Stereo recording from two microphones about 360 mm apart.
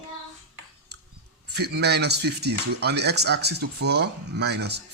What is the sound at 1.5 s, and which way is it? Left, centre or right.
Speech, right.